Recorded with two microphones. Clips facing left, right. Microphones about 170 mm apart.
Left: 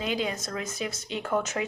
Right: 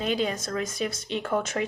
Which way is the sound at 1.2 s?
55° right (ahead or behind).